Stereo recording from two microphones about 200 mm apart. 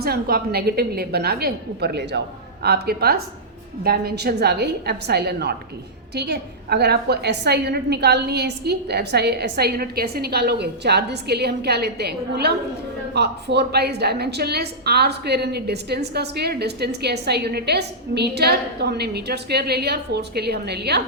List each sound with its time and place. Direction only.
0.0 s a woman's voice: 50° right (ahead or behind)